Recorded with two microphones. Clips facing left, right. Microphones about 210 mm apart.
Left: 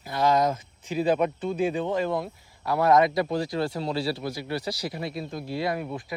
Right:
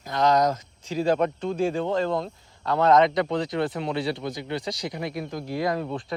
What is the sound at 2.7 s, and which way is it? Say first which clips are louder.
Speech: right 1 dB; 20° right (ahead or behind).